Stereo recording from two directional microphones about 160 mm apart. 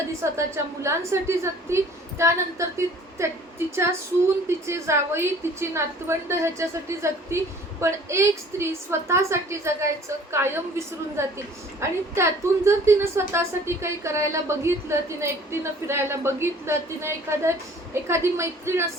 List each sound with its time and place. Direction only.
0.3 s a woman's voice: 15° right (ahead or behind)
4.4 s a woman's voice: 15° right (ahead or behind)